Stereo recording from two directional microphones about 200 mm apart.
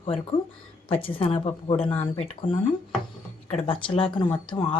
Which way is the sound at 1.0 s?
25° left (ahead or behind).